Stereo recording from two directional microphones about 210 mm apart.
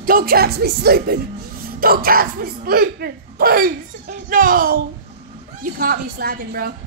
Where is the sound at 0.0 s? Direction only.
45° right (ahead or behind).